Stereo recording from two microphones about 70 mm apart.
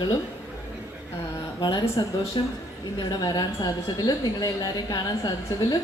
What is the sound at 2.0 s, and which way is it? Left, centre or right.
Speech, left.